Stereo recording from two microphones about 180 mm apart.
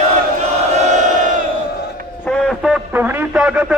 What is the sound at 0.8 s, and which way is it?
Crowd, 40° right (ahead or behind).